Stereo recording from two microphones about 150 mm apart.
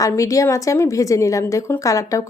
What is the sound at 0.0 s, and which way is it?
A woman's voice, 20° left (ahead or behind).